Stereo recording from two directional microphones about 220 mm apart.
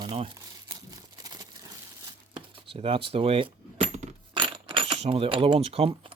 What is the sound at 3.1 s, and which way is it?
Coin, 25° right (ahead or behind).